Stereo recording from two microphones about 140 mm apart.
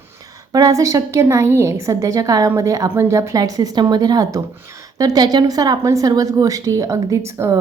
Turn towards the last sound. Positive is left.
turn(degrees=-20)  # may be behind; listen again after turning